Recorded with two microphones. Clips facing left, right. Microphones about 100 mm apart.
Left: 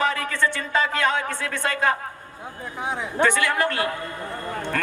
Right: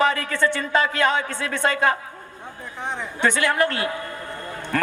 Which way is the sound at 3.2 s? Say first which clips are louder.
Right 3 dB; 20° right (ahead or behind).